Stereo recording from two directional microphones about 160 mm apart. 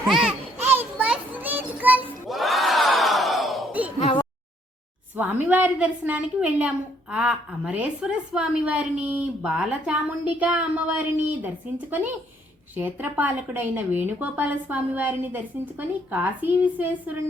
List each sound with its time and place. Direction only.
0.1 s children playing: 5° right (ahead or behind)
2.3 s battle cry: centre (ahead or behind)
4.0 s a sound: 30° left (ahead or behind)
5.1 s a woman's voice: 10° right (ahead or behind)